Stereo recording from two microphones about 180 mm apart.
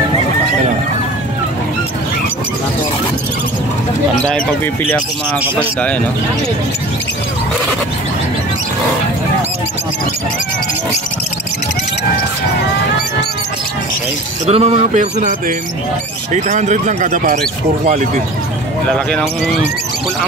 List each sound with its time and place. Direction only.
14.4 s speech: 35° right (ahead or behind)
16.3 s speech: 40° right (ahead or behind)
18.9 s speech: 5° left (ahead or behind)